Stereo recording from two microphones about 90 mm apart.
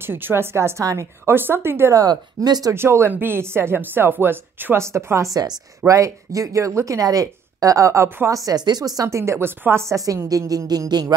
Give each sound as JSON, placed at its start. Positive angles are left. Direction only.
{"t": 0.0, "sound": "speech", "side_deg": -25}
{"t": 2.0, "sound": "speech", "side_deg": -50}
{"t": 2.7, "sound": "speech", "side_deg": -30}
{"t": 8.5, "sound": "speech", "side_deg": -50}
{"t": 10.9, "sound": "speech", "side_deg": -50}